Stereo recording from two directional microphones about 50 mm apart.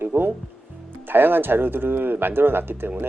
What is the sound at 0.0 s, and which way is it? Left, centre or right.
Music, right.